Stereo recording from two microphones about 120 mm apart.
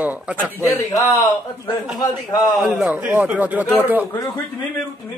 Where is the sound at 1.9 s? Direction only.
35° left (ahead or behind).